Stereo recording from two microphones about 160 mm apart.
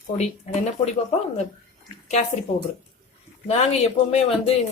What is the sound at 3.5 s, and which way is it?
Speech, 40° left (ahead or behind).